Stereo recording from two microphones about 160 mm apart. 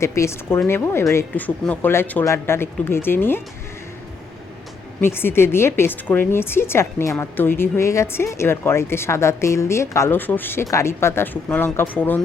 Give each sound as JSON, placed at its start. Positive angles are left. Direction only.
{"t": 0.0, "sound": "a woman's voice", "side_deg": 20}
{"t": 4.9, "sound": "a woman's voice", "side_deg": 15}